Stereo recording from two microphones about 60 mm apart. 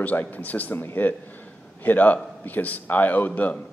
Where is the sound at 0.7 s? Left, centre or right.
Left.